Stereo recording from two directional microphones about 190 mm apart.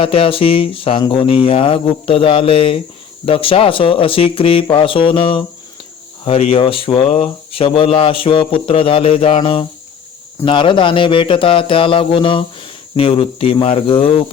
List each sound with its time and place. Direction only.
0.0 s speech: 30° left (ahead or behind)